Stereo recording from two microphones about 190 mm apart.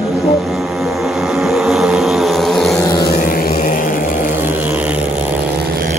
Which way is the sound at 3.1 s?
50° left (ahead or behind).